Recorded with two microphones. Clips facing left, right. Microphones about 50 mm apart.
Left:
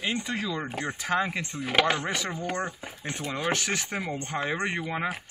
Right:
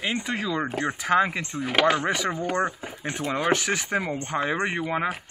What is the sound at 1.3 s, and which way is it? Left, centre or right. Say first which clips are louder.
Speech: right 1 dB; centre.